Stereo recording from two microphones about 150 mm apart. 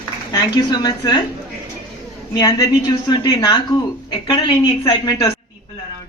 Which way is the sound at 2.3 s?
20° left (ahead or behind).